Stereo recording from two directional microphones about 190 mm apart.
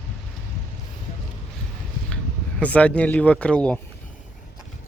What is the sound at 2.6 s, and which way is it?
Speech, 5° left (ahead or behind).